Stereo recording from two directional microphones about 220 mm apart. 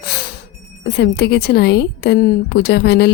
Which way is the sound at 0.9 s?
50° left (ahead or behind).